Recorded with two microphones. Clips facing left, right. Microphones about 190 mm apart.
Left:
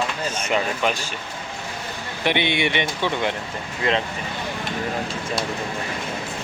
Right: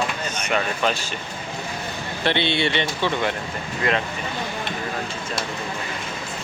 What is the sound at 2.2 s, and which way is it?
Speech, 15° left (ahead or behind).